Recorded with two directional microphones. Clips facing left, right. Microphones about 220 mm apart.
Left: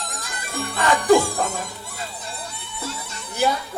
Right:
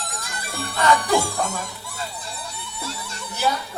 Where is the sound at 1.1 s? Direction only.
50° left (ahead or behind).